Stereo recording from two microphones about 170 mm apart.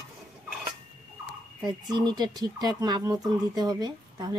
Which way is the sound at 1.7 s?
25° right (ahead or behind).